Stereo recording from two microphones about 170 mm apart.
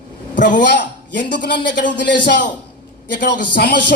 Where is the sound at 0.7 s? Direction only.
90° left.